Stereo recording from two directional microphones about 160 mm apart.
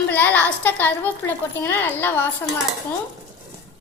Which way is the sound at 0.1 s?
10° left (ahead or behind).